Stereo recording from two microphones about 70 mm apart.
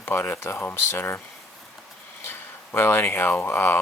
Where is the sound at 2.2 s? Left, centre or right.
Left.